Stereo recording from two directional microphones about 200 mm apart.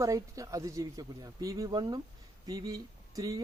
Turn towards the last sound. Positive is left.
turn(degrees=-15)  # may be behind; listen again after turning